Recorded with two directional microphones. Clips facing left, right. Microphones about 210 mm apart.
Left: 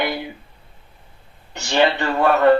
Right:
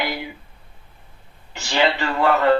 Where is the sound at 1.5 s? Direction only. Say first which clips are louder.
Left 3 dB; 20° left (ahead or behind).